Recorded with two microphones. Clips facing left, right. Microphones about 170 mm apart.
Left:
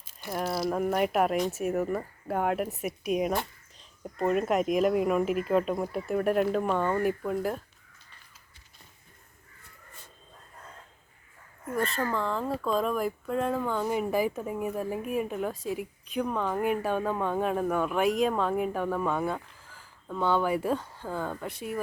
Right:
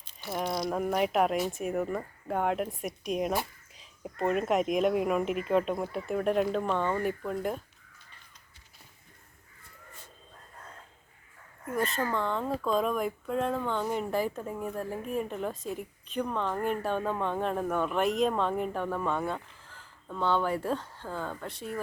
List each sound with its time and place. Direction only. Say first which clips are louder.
0.0 s a sound: even; 5° left (ahead or behind)
0.3 s speech: left 2 dB; 5° left (ahead or behind)
11.6 s speech: left 1 dB; centre (ahead or behind)